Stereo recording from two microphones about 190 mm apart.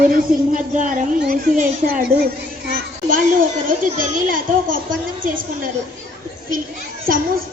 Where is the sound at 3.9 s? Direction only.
45° right (ahead or behind).